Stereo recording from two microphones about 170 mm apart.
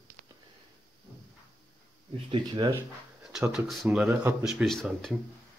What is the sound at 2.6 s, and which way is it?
Speech, 25° right (ahead or behind).